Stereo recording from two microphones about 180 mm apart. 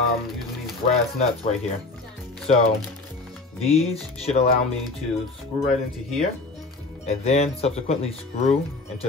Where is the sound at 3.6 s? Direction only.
35° left (ahead or behind).